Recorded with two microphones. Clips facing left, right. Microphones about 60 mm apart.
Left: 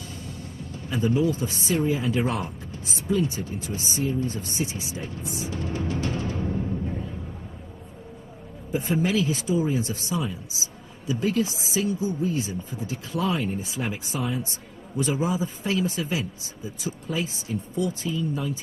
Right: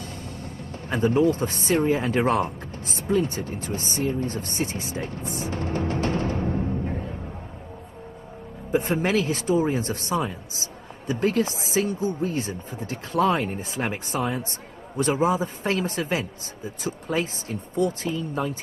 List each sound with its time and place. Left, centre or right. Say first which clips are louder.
0.8 s speech: right 3 dB; right
8.7 s speech: right 2 dB; right